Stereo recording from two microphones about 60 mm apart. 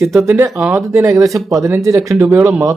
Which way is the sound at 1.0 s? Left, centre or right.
Right.